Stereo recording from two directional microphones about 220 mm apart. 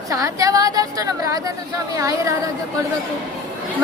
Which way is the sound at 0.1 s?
15° right (ahead or behind).